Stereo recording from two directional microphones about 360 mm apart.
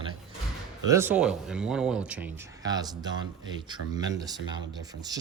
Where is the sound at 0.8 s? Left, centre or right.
Centre.